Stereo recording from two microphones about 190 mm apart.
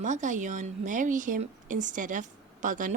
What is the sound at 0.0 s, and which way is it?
Speech, 40° right (ahead or behind).